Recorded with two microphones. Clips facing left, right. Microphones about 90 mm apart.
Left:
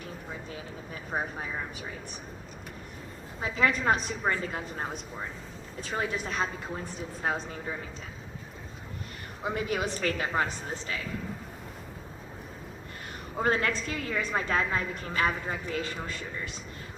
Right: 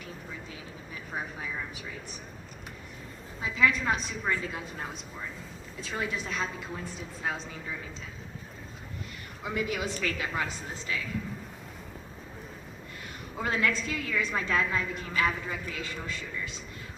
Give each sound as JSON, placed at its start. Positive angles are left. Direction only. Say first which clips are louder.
{"t": 1.1, "sound": "a woman's voice", "louder": "left 4 dB", "side_deg": 35}
{"t": 3.4, "sound": "a woman's voice", "louder": "left 1 dB", "side_deg": 40}
{"t": 5.8, "sound": "a woman's voice", "louder": "left 2 dB", "side_deg": 50}
{"t": 9.4, "sound": "a woman's voice", "louder": "left 2 dB", "side_deg": 35}
{"t": 13.4, "sound": "a woman's voice", "louder": "left 2 dB", "side_deg": 40}